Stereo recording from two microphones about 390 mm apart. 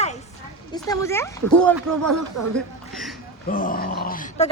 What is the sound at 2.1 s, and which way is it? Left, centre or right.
Speech, right.